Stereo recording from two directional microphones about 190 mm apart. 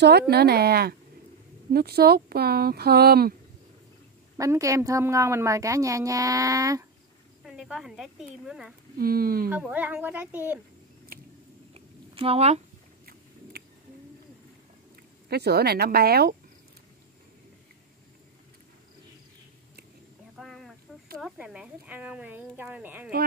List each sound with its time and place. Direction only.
0.0 s speech: 60° right (ahead or behind)
4.4 s a woman's voice: 15° right (ahead or behind)
7.4 s speech: centre (ahead or behind)
8.9 s speech: 50° right (ahead or behind)
9.5 s a woman's voice: 5° right (ahead or behind)
11.7 s a sound: 30° right (ahead or behind)
13.0 s biting: 55° right (ahead or behind)
15.2 s speech: 55° right (ahead or behind)
20.3 s a sound: centre (ahead or behind)
21.2 s a woman's voice: 5° right (ahead or behind)